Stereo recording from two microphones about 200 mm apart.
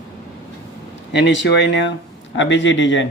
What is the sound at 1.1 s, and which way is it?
Speech, 60° left (ahead or behind).